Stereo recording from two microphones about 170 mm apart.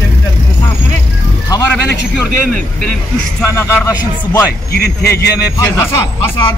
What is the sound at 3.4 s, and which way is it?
Speech, 15° left (ahead or behind).